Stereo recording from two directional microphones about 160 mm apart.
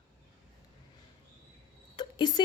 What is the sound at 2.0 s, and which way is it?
Cricket, 25° left (ahead or behind).